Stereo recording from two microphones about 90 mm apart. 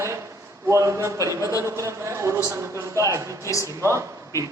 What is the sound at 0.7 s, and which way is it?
A man's voice, 35° right (ahead or behind).